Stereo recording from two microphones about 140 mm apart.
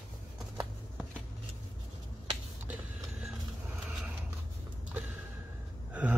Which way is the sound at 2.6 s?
10° right (ahead or behind).